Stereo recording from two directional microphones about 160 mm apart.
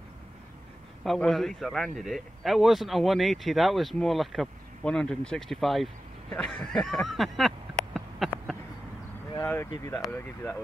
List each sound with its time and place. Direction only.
1.0 s a man's voice: centre (ahead or behind)
7.9 s a sound: centre (ahead or behind)
9.3 s vehicle: 15° left (ahead or behind)
9.7 s speech: 15° left (ahead or behind)